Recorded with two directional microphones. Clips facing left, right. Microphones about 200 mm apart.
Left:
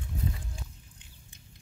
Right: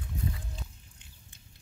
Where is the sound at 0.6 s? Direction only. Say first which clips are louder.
Even; 15° left (ahead or behind).